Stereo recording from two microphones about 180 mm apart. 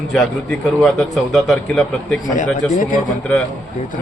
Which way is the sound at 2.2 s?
45° left (ahead or behind).